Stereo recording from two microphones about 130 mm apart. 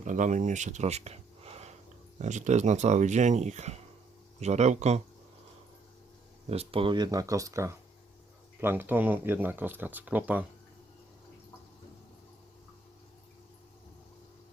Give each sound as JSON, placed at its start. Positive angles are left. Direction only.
{"t": 0.0, "sound": "speech", "side_deg": -70}
{"t": 2.1, "sound": "speech", "side_deg": -65}
{"t": 6.5, "sound": "speech", "side_deg": -50}